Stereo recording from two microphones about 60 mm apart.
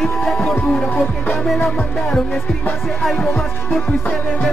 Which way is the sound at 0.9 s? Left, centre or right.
Left.